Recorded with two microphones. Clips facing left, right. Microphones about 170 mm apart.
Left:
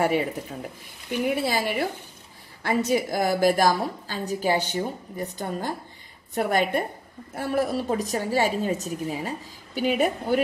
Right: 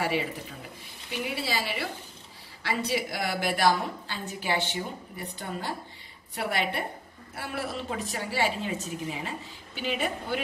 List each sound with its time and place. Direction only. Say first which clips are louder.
0.0 s a woman's voice: left 6 dB; 50° left (ahead or behind)